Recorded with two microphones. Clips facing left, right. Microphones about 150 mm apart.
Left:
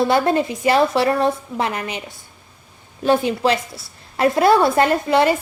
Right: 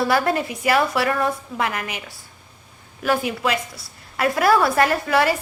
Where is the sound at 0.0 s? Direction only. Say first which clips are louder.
Left 3 dB; 25° left (ahead or behind).